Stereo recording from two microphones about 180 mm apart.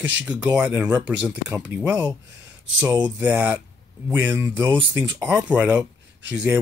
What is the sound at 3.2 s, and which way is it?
Speech, 10° right (ahead or behind).